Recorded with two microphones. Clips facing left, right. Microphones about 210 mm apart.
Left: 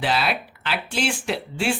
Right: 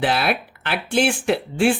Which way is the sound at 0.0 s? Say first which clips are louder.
Right 3 dB; 55° right (ahead or behind).